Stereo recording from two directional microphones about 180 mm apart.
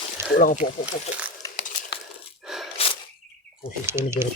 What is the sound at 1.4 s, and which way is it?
Crumpling, 20° left (ahead or behind).